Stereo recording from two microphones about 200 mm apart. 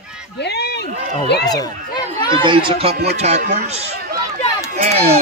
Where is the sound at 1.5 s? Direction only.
20° left (ahead or behind).